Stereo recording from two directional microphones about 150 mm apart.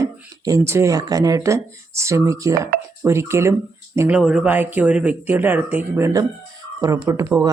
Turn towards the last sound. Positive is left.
turn(degrees=-20)  # may be behind; listen again after turning